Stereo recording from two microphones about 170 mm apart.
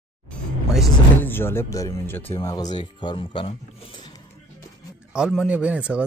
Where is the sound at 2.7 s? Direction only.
25° left (ahead or behind).